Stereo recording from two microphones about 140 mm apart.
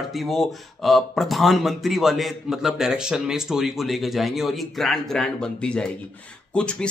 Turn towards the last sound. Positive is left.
turn(degrees=5)  # may be behind; listen again after turning